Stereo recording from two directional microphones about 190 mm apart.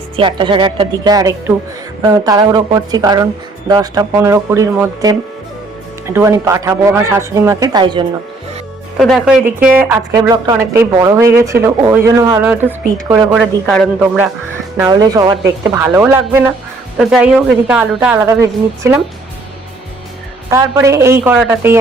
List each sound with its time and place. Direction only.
0.2 s a woman's voice: 25° right (ahead or behind)
6.1 s speech: 15° right (ahead or behind)
9.0 s a woman's voice: centre (ahead or behind)
10.2 s a woman's voice: 20° right (ahead or behind); by 14.3 s centre (ahead or behind)
14.8 s a woman's voice: 20° right (ahead or behind)
20.5 s speech: 15° right (ahead or behind)